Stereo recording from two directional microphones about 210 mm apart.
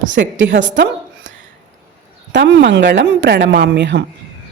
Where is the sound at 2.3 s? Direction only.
60° right (ahead or behind).